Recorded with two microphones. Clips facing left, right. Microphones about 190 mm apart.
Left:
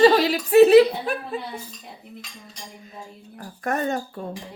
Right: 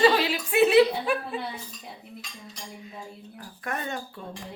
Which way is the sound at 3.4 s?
45° left (ahead or behind).